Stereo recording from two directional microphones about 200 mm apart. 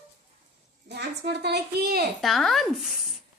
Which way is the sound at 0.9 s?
55° right (ahead or behind).